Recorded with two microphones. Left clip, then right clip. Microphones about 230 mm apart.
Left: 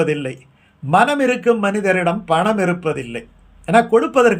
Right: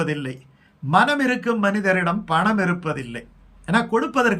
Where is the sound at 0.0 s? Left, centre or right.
Centre.